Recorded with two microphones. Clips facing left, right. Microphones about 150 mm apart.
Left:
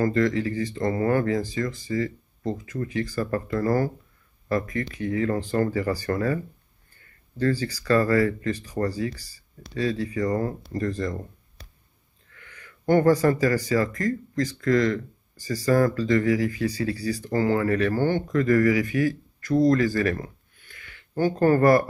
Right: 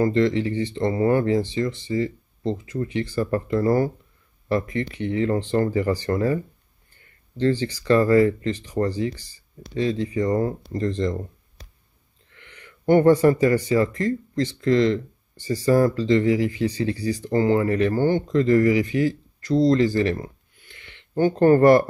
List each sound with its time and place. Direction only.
0.0 s speech: 25° right (ahead or behind)
12.3 s speech: 25° right (ahead or behind)